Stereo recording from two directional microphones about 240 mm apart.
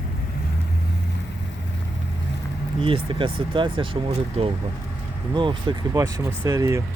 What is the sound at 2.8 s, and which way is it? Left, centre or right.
Speech, right.